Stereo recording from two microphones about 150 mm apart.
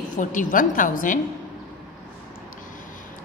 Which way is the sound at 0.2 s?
60° left (ahead or behind).